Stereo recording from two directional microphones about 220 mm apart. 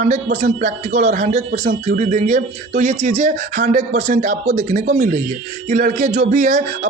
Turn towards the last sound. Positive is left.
turn(degrees=-35)  # may be behind; listen again after turning